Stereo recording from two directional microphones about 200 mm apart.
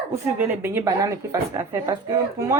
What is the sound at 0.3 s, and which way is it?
A woman's voice, 10° right (ahead or behind).